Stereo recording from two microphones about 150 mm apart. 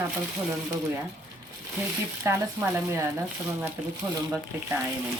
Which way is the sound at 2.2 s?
15° right (ahead or behind).